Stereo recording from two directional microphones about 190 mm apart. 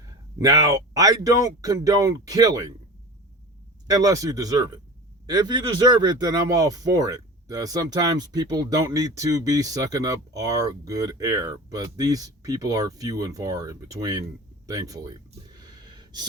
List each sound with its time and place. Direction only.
0.3 s speech: 20° right (ahead or behind)
3.8 s speech: 20° right (ahead or behind)
15.6 s a sound: 20° right (ahead or behind)